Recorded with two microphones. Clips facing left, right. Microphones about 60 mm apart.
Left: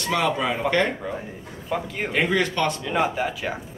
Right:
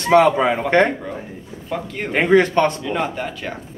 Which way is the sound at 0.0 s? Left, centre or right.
Right.